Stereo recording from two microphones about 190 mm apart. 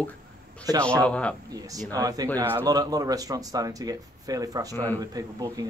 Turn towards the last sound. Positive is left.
turn(degrees=-20)  # may be behind; listen again after turning